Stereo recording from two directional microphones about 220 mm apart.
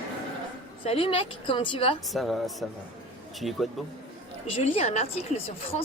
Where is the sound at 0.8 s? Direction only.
25° left (ahead or behind).